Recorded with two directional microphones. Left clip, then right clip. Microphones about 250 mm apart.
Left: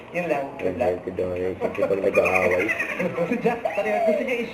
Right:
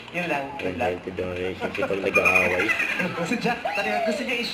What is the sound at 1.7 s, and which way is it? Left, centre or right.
Speech, centre.